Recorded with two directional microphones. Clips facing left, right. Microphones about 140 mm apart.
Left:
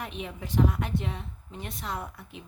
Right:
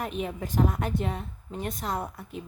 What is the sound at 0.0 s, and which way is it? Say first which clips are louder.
A woman's voice: right 5 dB; 45° right (ahead or behind).